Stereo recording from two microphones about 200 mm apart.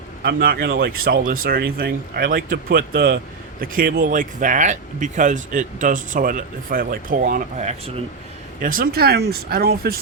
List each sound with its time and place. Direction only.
0.2 s speech: 50° right (ahead or behind); by 8.0 s 30° right (ahead or behind)
8.6 s speech: 45° right (ahead or behind)